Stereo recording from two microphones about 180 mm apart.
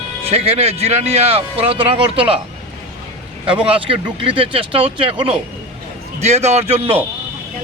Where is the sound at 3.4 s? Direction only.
30° right (ahead or behind).